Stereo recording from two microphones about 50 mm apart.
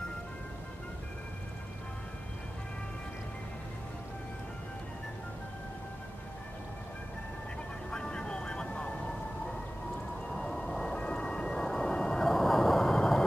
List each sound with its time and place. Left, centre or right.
7.9 s vehicle: centre
10.2 s whale vocalization: centre